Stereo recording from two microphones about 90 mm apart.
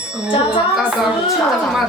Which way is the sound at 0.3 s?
90° left.